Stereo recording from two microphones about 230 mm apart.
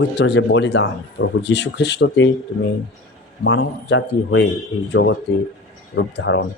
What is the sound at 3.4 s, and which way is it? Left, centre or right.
Speech, left.